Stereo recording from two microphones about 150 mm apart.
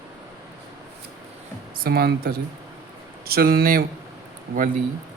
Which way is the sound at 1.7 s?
85° right.